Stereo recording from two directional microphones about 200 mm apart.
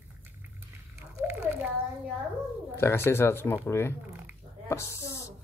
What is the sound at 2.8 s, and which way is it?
Speech, 10° left (ahead or behind).